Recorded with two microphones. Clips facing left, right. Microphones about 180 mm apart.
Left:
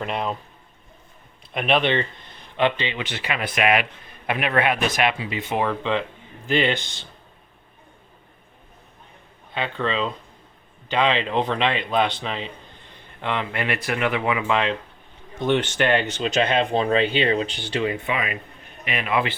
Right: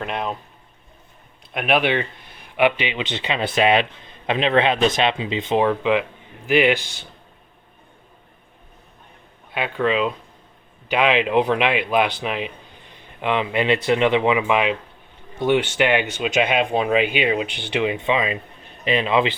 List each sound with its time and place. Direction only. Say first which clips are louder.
0.0 s speech: even; centre (ahead or behind)
1.5 s a man's voice: right 1 dB; 5° right (ahead or behind)
9.6 s a man's voice: right 4 dB; 10° right (ahead or behind); by 19.3 s 25° right (ahead or behind)